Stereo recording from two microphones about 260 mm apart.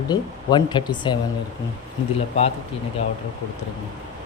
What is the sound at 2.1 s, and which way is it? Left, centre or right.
Speech, left.